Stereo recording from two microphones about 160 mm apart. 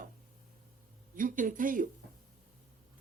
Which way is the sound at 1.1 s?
55° right (ahead or behind).